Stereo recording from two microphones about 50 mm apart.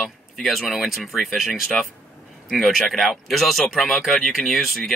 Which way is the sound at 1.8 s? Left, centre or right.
Centre.